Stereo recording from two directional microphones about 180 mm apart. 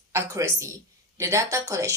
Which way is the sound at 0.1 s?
15° right (ahead or behind).